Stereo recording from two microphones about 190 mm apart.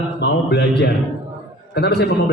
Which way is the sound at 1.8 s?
60° left (ahead or behind).